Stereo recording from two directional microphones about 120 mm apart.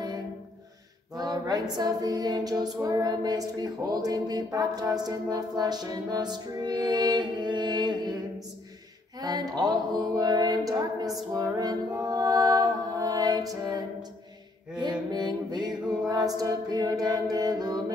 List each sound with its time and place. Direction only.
1.1 s a sound: 30° right (ahead or behind)
2.8 s female singing: 30° right (ahead or behind)
9.2 s music: 35° right (ahead or behind)
14.8 s mantra: 35° right (ahead or behind)
16.1 s music: 35° right (ahead or behind)